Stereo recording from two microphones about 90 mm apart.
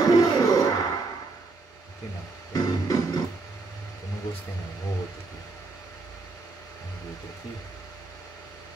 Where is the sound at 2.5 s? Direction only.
40° left (ahead or behind).